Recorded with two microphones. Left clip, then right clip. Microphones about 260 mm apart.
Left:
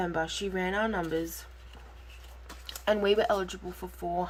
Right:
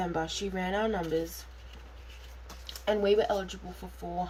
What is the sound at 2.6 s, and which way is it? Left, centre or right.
Speech, centre.